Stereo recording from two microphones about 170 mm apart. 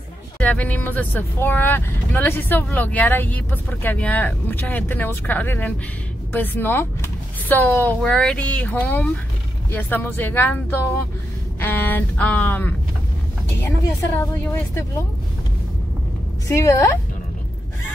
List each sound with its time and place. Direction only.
0.4 s speech: 10° left (ahead or behind)
16.4 s speech: 15° left (ahead or behind)